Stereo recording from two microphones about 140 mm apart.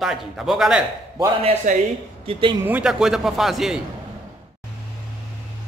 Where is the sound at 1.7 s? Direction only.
65° right (ahead or behind).